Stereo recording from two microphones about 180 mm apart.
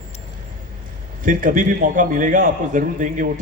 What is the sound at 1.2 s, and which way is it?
A man's voice, 50° right (ahead or behind).